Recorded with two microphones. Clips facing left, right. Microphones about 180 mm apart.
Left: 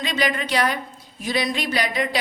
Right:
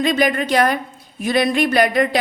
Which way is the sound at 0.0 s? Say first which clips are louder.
Right 7 dB; 50° right (ahead or behind).